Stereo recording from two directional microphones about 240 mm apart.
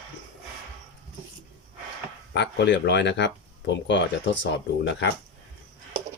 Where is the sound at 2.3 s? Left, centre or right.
Left.